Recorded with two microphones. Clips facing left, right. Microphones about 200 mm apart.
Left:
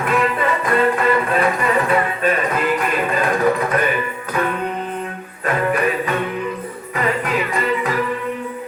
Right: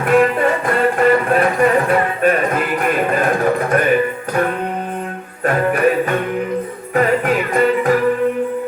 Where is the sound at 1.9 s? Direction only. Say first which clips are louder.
Right 3 dB; 50° right (ahead or behind).